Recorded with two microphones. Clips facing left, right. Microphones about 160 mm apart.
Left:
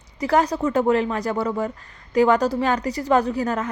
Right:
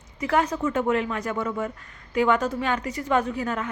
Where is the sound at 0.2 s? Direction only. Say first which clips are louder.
Left 4 dB; 35° left (ahead or behind).